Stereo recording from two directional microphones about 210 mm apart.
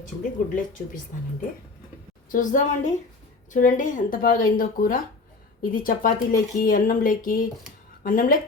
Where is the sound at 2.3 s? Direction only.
35° left (ahead or behind).